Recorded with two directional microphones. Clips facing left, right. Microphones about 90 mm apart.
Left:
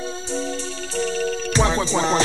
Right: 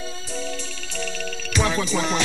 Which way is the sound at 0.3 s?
35° left (ahead or behind).